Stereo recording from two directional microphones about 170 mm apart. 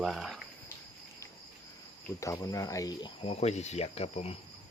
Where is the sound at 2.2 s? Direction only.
20° left (ahead or behind); by 4.3 s 40° left (ahead or behind).